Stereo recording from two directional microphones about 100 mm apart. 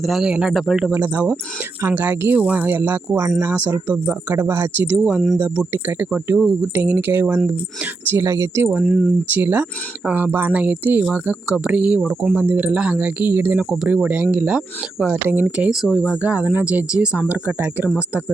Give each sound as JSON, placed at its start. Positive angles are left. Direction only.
{"t": 0.0, "sound": "speech", "side_deg": 0}
{"t": 0.9, "sound": "speech", "side_deg": -20}
{"t": 3.2, "sound": "speech", "side_deg": -30}
{"t": 3.5, "sound": "speech", "side_deg": -15}
{"t": 8.8, "sound": "speech", "side_deg": -5}
{"t": 9.3, "sound": "speech", "side_deg": -15}